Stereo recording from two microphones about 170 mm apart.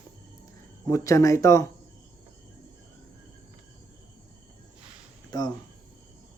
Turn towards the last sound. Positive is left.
turn(degrees=25)  # may be behind; listen again after turning